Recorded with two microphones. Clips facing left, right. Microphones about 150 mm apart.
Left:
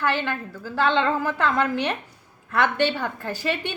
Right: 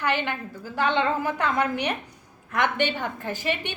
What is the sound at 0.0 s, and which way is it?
A woman's voice, 15° right (ahead or behind).